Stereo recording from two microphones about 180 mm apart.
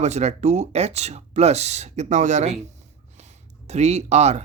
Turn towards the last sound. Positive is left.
turn(degrees=-40)  # may be behind; listen again after turning